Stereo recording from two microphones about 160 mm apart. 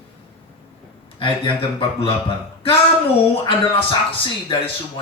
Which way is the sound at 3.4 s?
30° left (ahead or behind).